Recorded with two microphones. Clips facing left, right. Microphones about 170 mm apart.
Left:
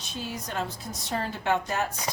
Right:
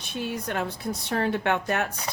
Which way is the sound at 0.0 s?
60° right (ahead or behind).